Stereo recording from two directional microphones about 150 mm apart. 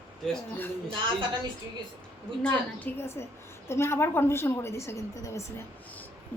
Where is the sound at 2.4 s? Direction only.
10° left (ahead or behind).